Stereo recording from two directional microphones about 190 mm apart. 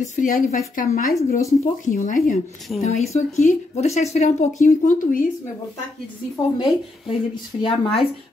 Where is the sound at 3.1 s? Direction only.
35° left (ahead or behind).